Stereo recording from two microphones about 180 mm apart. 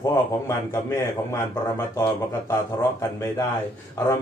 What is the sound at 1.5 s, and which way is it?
A man's voice, 15° left (ahead or behind).